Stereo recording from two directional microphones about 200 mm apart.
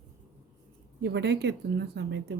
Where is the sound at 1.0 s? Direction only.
60° right (ahead or behind).